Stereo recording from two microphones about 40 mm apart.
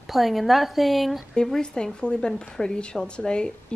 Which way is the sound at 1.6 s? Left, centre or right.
Left.